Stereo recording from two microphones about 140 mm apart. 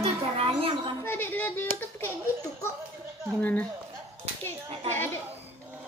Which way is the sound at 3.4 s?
10° left (ahead or behind).